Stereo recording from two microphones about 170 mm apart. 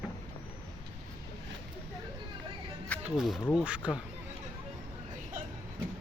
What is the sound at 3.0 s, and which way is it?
Speech, centre (ahead or behind).